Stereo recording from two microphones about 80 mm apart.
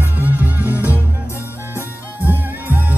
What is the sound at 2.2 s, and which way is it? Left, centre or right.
Music, right.